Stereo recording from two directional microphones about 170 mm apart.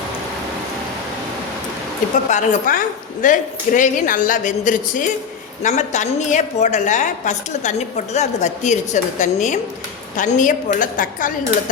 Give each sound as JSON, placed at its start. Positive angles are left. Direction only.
{"t": 2.3, "sound": "a woman's voice", "side_deg": 50}